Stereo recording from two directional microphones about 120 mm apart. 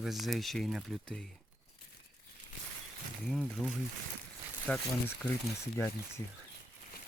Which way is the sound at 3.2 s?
5° left (ahead or behind).